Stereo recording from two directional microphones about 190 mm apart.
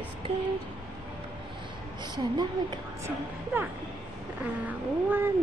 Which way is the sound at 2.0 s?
25° right (ahead or behind).